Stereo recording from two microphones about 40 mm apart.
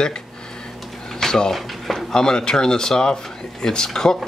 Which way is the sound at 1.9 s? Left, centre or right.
Centre.